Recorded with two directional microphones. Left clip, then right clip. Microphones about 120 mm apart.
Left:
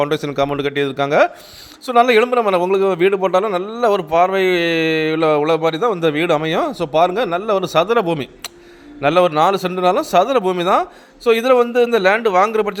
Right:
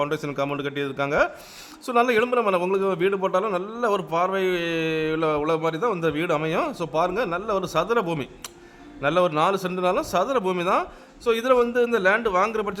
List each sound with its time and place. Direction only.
0.0 s a man's voice: 35° left (ahead or behind)